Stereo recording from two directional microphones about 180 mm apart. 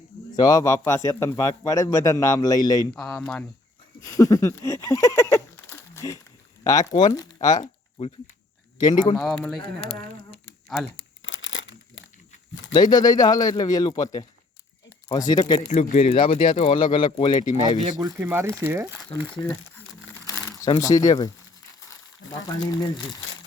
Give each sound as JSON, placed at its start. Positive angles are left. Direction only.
{"t": 0.3, "sound": "a man's voice", "side_deg": 20}
{"t": 2.9, "sound": "speech", "side_deg": 5}
{"t": 4.0, "sound": "a man's voice", "side_deg": 20}
{"t": 9.1, "sound": "speech", "side_deg": 5}
{"t": 9.6, "sound": "speech", "side_deg": 30}
{"t": 11.2, "sound": "crumpling", "side_deg": 90}
{"t": 12.6, "sound": "a man's voice", "side_deg": 25}
{"t": 15.7, "sound": "speech", "side_deg": 40}
{"t": 16.1, "sound": "a man's voice", "side_deg": 25}
{"t": 17.7, "sound": "speech", "side_deg": -20}
{"t": 20.2, "sound": "a sound", "side_deg": 20}
{"t": 22.4, "sound": "a man's voice", "side_deg": 20}